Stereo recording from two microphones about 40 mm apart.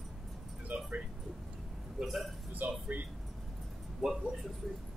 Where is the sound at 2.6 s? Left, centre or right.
Right.